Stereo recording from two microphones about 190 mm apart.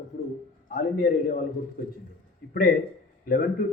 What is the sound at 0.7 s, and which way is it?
A man's voice, 45° left (ahead or behind).